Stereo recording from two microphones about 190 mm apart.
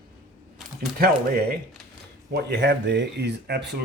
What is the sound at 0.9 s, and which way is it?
Speech, 50° right (ahead or behind).